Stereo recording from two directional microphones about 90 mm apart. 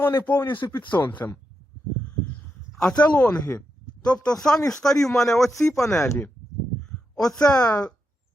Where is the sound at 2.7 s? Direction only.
10° left (ahead or behind).